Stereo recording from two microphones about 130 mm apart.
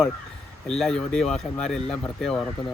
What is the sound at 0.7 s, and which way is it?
Speech, 5° left (ahead or behind).